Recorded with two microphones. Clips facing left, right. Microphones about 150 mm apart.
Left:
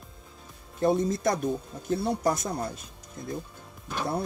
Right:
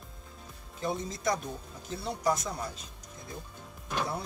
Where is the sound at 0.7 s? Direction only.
55° left (ahead or behind).